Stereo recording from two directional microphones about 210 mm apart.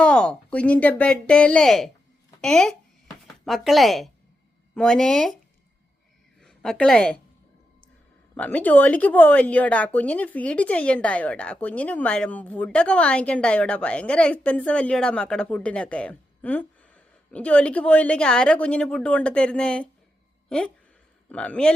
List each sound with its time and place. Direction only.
0.0 s speech: 5° left (ahead or behind)
6.4 s a woman's voice: 5° left (ahead or behind)
8.4 s a woman's voice: 5° left (ahead or behind)
21.2 s a man's voice: 5° left (ahead or behind)